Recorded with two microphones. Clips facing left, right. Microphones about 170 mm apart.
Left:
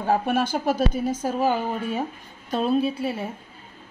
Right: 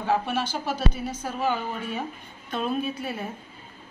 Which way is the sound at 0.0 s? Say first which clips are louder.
Left 4 dB; 45° left (ahead or behind).